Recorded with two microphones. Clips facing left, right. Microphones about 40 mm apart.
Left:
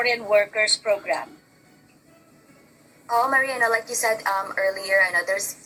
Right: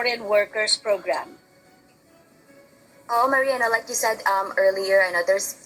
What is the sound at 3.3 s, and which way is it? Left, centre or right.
Speech, centre.